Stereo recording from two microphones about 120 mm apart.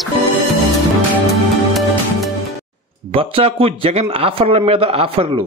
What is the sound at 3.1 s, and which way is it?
A man's voice, 50° right (ahead or behind).